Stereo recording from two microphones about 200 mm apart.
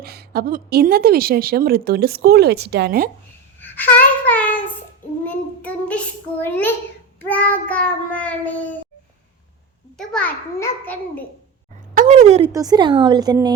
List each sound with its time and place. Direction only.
0.0 s a woman's voice: 50° right (ahead or behind)
3.6 s child singing: 10° left (ahead or behind)
5.2 s a child's voice: 5° left (ahead or behind)
7.2 s child singing: 10° left (ahead or behind)
7.7 s a child's voice: 5° left (ahead or behind)
10.0 s a child's voice: 5° left (ahead or behind)
11.9 s speech: 35° right (ahead or behind)
12.5 s speech: 20° right (ahead or behind)